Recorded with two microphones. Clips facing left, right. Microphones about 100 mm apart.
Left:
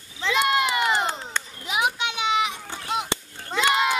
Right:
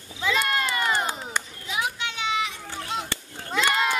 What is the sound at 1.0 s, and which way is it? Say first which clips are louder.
Crowd: left 1 dB; 10° right (ahead or behind).